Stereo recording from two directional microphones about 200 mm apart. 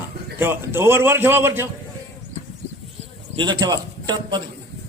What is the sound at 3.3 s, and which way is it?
A man's voice, 20° right (ahead or behind).